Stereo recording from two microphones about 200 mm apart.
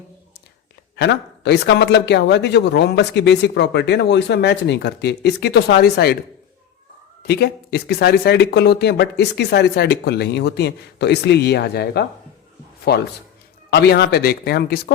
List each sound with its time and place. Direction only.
0.9 s speech: 60° left (ahead or behind)
7.2 s speech: 55° left (ahead or behind)